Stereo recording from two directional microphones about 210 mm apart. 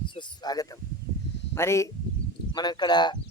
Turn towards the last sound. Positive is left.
turn(degrees=20)  # may be behind; listen again after turning